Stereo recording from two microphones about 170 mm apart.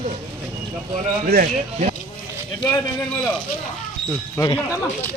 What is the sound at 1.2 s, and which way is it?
Speech, 65° right (ahead or behind).